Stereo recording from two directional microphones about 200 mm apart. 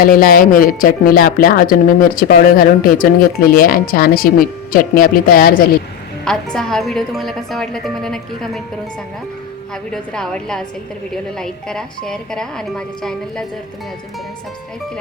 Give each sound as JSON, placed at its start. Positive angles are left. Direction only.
{"t": 0.0, "sound": "speech", "side_deg": 45}
{"t": 6.2, "sound": "a woman's voice", "side_deg": 5}
{"t": 9.9, "sound": "a woman's voice", "side_deg": 5}